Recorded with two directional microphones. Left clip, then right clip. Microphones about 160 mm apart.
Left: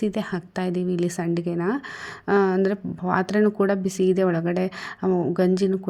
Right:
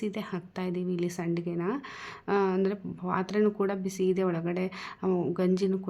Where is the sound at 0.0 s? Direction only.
35° left (ahead or behind).